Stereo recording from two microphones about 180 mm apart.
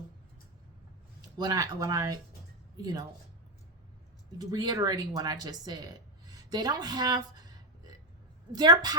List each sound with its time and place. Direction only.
1.4 s speech: 20° right (ahead or behind)
4.4 s speech: 20° right (ahead or behind)
8.5 s speech: 20° right (ahead or behind)